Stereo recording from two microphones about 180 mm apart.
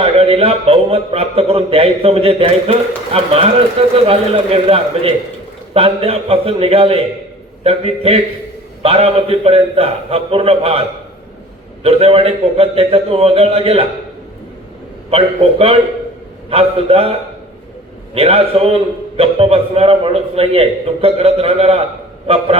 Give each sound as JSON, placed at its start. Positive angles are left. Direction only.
{"t": 0.0, "sound": "a man's voice", "side_deg": -35}
{"t": 15.1, "sound": "a man's voice", "side_deg": -30}